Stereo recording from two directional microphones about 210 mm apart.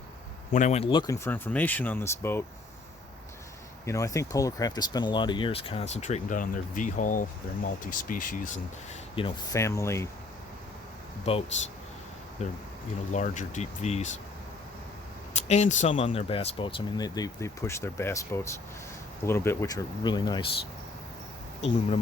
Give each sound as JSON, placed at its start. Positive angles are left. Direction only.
{"t": 0.5, "sound": "speech", "side_deg": 35}
{"t": 3.8, "sound": "speech", "side_deg": 15}
{"t": 9.1, "sound": "speech", "side_deg": 25}
{"t": 9.6, "sound": "speech", "side_deg": 15}
{"t": 11.3, "sound": "speech", "side_deg": 25}
{"t": 13.1, "sound": "speech", "side_deg": 35}
{"t": 15.4, "sound": "speech", "side_deg": 30}